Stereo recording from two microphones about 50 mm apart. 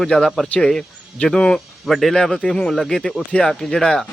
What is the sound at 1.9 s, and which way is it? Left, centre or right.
Speech, centre.